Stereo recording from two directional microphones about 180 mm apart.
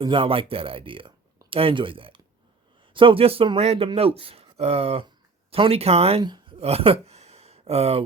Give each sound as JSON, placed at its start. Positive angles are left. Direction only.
{"t": 0.0, "sound": "speech", "side_deg": -30}